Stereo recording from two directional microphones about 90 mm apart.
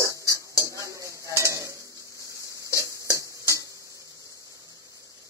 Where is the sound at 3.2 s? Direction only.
35° right (ahead or behind).